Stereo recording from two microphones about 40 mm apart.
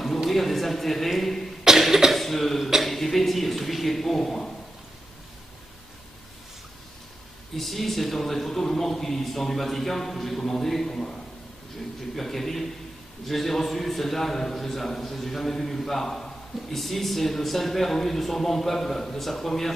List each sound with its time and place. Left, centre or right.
0.3 s a man's voice: centre
1.6 s cough: centre
2.1 s a man's voice: centre
7.5 s a man's voice: centre
12.2 s a man's voice: centre